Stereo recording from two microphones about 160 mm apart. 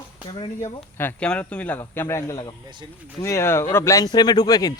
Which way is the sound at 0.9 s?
10° left (ahead or behind).